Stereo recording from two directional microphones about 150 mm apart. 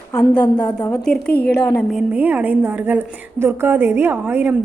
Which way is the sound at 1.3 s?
90° left.